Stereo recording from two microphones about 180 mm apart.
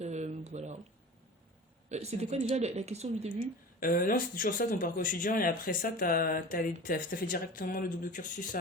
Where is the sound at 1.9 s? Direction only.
35° right (ahead or behind).